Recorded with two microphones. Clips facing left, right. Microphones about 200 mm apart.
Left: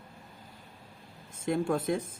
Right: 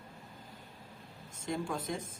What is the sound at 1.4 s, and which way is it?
Speech, 55° left (ahead or behind).